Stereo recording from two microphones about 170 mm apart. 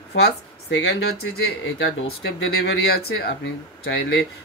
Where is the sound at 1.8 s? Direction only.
75° left (ahead or behind).